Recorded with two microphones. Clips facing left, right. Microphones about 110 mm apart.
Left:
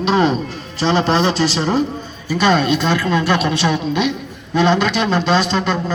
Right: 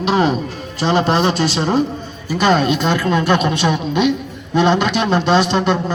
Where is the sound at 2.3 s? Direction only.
15° right (ahead or behind).